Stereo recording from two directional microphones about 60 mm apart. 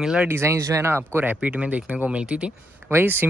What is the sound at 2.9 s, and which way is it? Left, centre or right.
Speech, right.